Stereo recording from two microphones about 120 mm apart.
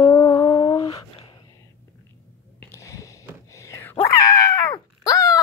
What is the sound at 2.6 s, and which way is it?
Whispering, 25° left (ahead or behind).